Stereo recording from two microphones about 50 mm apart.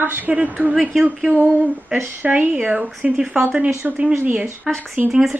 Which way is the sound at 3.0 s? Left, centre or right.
Centre.